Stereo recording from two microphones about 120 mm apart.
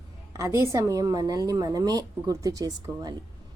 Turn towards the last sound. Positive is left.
turn(degrees=-30)  # may be behind; listen again after turning